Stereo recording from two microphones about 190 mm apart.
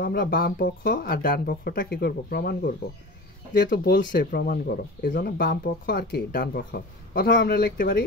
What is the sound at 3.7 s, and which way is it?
Speech, 50° left (ahead or behind).